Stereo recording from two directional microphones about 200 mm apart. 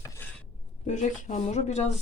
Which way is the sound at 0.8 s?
35° left (ahead or behind).